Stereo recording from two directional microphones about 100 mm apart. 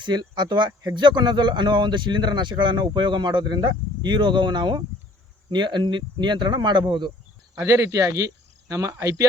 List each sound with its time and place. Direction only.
0.0 s speech: 45° right (ahead or behind)
7.6 s speech: 35° right (ahead or behind)